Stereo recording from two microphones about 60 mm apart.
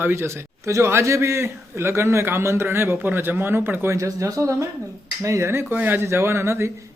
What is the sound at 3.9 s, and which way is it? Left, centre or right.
Speech, right.